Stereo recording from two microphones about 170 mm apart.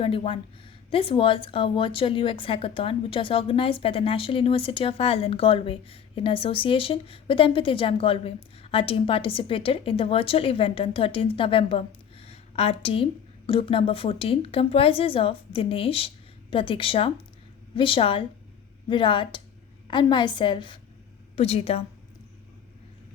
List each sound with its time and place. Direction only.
0.0 s a woman's voice: 30° left (ahead or behind)